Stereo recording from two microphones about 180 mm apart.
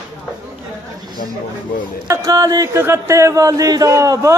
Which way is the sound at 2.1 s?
20° right (ahead or behind).